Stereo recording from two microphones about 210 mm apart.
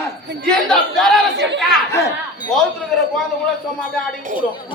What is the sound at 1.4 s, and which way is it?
Chatter, 55° right (ahead or behind).